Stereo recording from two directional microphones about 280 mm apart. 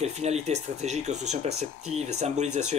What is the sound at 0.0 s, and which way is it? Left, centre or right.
Speech, right.